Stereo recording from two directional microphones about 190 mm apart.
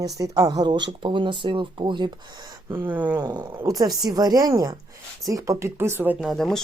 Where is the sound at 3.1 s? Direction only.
20° right (ahead or behind).